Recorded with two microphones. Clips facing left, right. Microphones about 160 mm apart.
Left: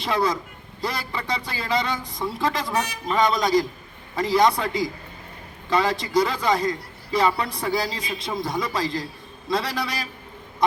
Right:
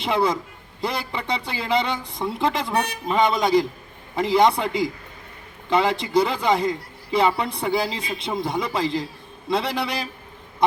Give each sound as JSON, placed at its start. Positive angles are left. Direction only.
{"t": 0.0, "sound": "a woman's voice", "side_deg": -25}